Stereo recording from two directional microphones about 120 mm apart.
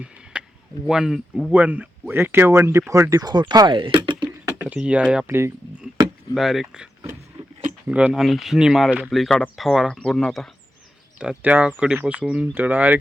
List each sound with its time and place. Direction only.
0.3 s a sound: 10° right (ahead or behind)
0.9 s speech: 5° right (ahead or behind)
1.5 s speech: 10° right (ahead or behind); by 4.5 s 40° right (ahead or behind)
4.5 s speech: 15° right (ahead or behind)
6.3 s speech: 5° right (ahead or behind)
7.9 s speech: 10° right (ahead or behind)
11.2 s speech: 10° right (ahead or behind)